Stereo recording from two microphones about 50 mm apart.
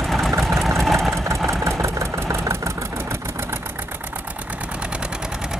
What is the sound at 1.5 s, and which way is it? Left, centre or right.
Vehicle, right.